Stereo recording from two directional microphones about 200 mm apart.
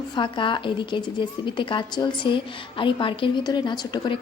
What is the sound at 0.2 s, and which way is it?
A woman's voice, 25° left (ahead or behind).